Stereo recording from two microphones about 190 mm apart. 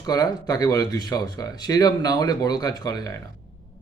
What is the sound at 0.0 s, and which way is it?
Speech, 20° left (ahead or behind).